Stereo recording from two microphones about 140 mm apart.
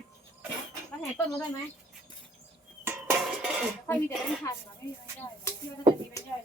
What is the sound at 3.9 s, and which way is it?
Speech, 20° left (ahead or behind).